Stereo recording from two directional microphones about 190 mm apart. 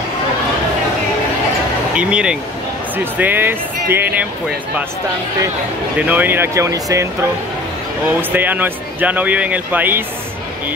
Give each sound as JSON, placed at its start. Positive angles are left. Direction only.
{"t": 2.0, "sound": "speech", "side_deg": -5}
{"t": 5.9, "sound": "speech", "side_deg": -10}
{"t": 8.2, "sound": "speech", "side_deg": -10}